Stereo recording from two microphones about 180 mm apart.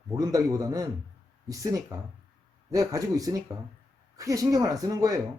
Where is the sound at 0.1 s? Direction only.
20° right (ahead or behind).